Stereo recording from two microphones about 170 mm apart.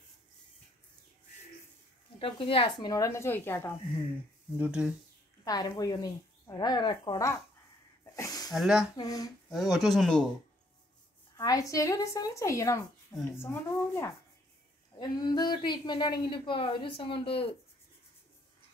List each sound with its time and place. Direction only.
2.1 s speech: 30° left (ahead or behind)
2.9 s speech: 20° left (ahead or behind)
4.6 s speech: 5° right (ahead or behind)
5.4 s a woman's voice: 20° left (ahead or behind)
8.0 s sneeze: 20° left (ahead or behind)
8.5 s speech: centre (ahead or behind)
8.9 s a woman's voice: 20° left (ahead or behind)
9.5 s speech: centre (ahead or behind)
11.3 s a woman's voice: 20° left (ahead or behind)